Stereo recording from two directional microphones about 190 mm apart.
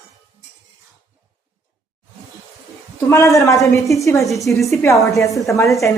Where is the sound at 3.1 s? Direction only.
15° left (ahead or behind).